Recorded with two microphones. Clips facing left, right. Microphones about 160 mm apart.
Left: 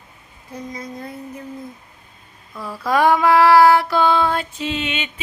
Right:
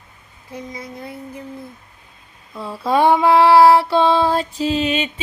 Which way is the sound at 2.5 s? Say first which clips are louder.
Right 2 dB; 25° right (ahead or behind).